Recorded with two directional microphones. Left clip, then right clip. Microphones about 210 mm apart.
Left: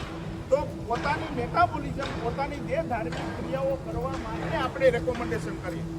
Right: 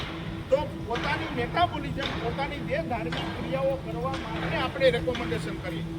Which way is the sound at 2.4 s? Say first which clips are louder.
Left 2 dB; 10° left (ahead or behind).